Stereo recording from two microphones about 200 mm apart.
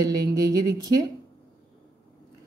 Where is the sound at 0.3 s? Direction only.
15° right (ahead or behind).